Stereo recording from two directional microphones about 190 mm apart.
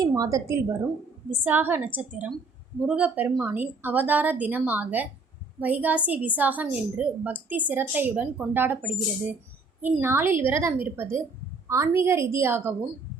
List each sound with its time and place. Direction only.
0.0 s a woman's voice: 15° right (ahead or behind)